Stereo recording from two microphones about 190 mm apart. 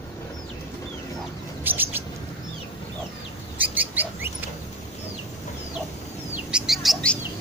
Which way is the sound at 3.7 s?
10° right (ahead or behind).